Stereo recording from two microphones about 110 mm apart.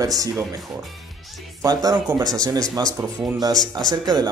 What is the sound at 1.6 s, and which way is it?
Speech, 35° right (ahead or behind).